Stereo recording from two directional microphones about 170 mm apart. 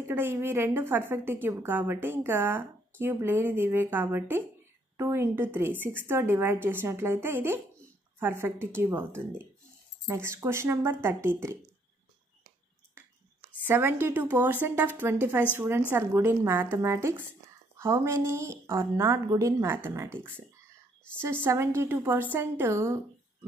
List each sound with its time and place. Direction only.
0.1 s a woman's voice: 15° right (ahead or behind)
13.7 s a woman's voice: 15° right (ahead or behind)